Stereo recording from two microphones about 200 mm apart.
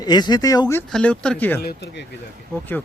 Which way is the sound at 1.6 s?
55° left (ahead or behind).